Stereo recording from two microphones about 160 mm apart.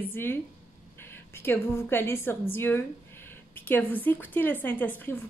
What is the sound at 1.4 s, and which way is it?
A woman's voice, 15° left (ahead or behind).